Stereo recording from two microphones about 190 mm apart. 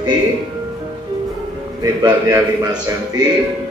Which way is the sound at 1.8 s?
15° right (ahead or behind).